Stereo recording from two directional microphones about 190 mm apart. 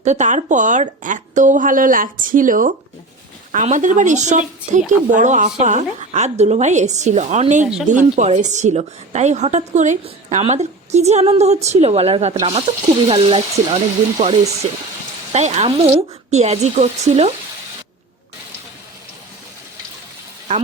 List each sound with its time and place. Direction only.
0.0 s a woman's voice: 40° right (ahead or behind)